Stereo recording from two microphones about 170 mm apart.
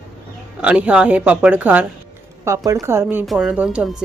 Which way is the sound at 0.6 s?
5° right (ahead or behind).